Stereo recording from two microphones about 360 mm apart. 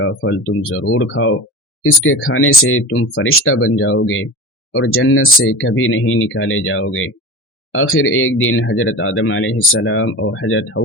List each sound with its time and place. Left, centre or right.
0.0 s speech: left